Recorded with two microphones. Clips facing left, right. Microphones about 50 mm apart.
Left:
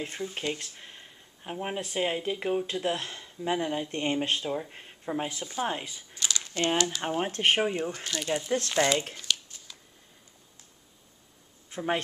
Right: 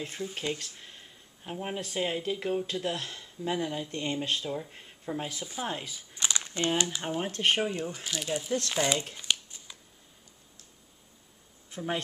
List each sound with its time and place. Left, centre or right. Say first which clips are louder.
0.0 s speech: left 2 dB; centre
3.8 s speech: left 4 dB; left
6.1 s a sound: even; right
7.0 s speech: left 2 dB; left
7.9 s speech: left 2 dB; centre
8.3 s speech: left 2 dB; centre
9.1 s crumpling: even; centre
11.7 s speech: left 4 dB; left